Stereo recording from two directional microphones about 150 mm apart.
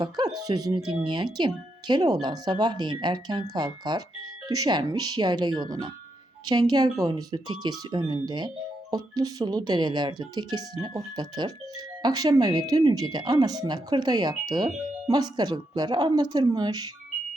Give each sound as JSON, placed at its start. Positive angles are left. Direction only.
{"t": 0.4, "sound": "speech", "side_deg": -25}